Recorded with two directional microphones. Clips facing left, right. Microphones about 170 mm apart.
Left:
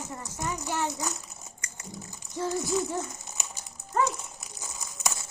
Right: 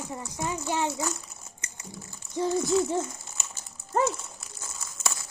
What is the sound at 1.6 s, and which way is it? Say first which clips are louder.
Typing: right 1 dB; 20° right (ahead or behind).